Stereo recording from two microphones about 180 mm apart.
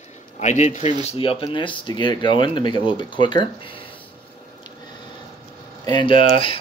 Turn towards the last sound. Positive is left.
turn(degrees=30)  # may be behind; listen again after turning